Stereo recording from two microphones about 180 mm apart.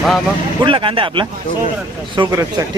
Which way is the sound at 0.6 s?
30° right (ahead or behind).